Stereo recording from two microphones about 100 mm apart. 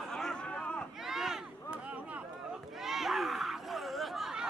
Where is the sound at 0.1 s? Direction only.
5° left (ahead or behind).